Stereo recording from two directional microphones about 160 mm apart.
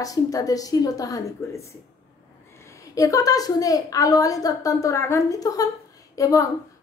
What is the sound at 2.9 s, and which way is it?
A woman's voice, 20° left (ahead or behind).